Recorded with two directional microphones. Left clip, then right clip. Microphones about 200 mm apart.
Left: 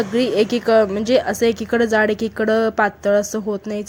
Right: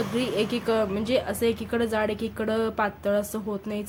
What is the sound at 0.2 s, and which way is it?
A woman's voice, 35° left (ahead or behind).